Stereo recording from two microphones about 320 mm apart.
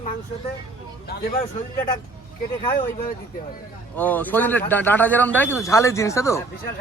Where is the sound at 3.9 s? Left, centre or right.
Centre.